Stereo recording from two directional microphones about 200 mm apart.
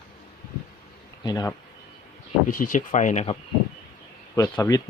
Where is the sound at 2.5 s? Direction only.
45° left (ahead or behind).